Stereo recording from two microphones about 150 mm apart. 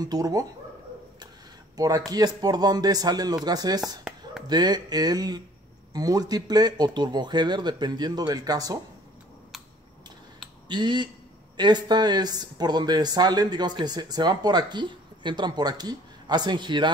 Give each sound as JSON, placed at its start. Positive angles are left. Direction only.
{"t": 0.0, "sound": "speech", "side_deg": -25}
{"t": 1.8, "sound": "speech", "side_deg": -25}
{"t": 10.7, "sound": "speech", "side_deg": -30}